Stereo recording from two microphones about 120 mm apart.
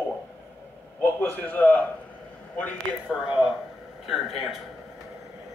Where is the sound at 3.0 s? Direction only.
5° right (ahead or behind).